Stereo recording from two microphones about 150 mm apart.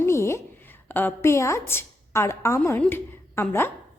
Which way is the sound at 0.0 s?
15° left (ahead or behind).